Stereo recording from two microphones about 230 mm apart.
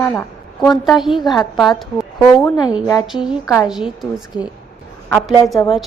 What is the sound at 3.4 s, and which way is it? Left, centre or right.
Speech, centre.